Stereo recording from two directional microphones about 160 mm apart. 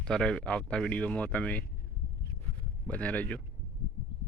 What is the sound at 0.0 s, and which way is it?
Speech, 5° left (ahead or behind).